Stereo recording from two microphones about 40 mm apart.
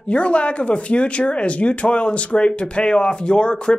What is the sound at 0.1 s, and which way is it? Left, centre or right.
Speech, left.